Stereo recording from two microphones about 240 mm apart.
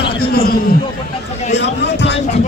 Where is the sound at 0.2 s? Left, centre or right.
Left.